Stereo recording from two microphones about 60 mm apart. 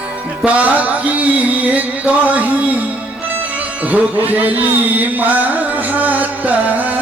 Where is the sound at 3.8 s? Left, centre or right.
Right.